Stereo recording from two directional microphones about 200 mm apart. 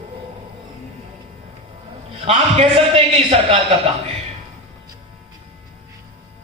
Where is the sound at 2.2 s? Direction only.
30° right (ahead or behind).